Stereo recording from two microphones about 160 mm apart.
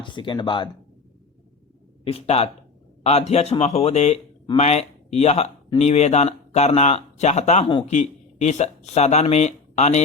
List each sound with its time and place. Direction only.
0.0 s speech: 30° left (ahead or behind)
2.0 s speech: 40° left (ahead or behind)